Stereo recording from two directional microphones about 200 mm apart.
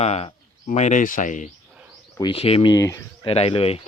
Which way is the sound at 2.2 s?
25° left (ahead or behind).